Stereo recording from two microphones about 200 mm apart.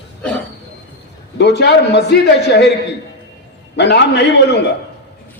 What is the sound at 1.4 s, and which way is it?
Speech, 60° left (ahead or behind).